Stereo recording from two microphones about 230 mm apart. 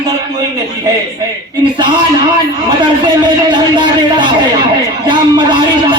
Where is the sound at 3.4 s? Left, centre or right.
Centre.